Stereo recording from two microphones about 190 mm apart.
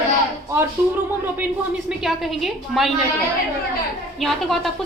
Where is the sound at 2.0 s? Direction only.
Centre (ahead or behind).